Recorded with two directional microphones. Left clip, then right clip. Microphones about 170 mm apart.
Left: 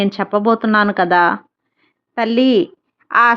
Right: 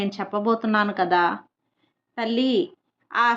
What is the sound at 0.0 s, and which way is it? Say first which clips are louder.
A woman's voice: left 9 dB; 40° left (ahead or behind).